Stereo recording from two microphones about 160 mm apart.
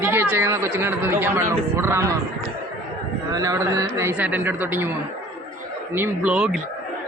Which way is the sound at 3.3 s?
20° right (ahead or behind).